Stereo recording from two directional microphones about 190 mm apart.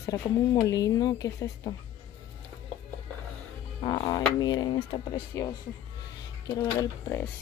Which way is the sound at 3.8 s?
20° left (ahead or behind).